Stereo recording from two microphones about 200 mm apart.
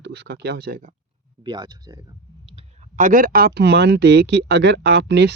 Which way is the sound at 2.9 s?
45° right (ahead or behind).